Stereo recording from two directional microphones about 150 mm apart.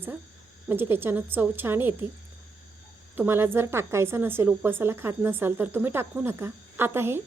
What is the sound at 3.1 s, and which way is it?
A woman's voice, 15° right (ahead or behind).